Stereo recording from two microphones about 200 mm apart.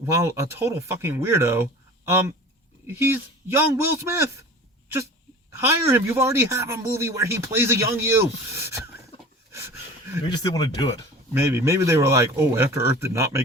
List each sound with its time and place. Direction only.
0.0 s speech: 15° right (ahead or behind)
5.5 s speech: 15° right (ahead or behind)
9.5 s a sound: 15° right (ahead or behind)
10.2 s speech: 20° left (ahead or behind)
11.3 s speech: 15° right (ahead or behind)